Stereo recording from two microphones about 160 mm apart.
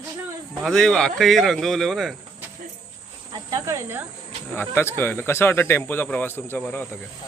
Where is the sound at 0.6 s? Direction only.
5° left (ahead or behind).